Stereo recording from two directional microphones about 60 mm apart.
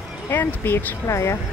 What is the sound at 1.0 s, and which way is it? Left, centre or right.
Speech, left.